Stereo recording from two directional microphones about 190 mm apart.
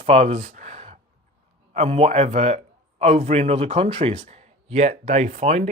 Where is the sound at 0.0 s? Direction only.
35° right (ahead or behind).